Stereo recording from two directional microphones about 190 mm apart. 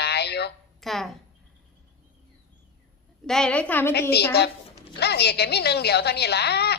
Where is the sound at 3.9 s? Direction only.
60° left (ahead or behind).